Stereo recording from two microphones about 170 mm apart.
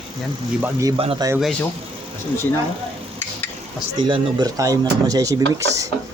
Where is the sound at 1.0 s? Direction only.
35° right (ahead or behind).